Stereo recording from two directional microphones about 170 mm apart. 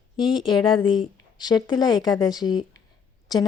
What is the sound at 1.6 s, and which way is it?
Speech, 25° left (ahead or behind).